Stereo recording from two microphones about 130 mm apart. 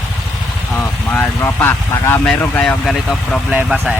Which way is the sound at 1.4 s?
15° left (ahead or behind).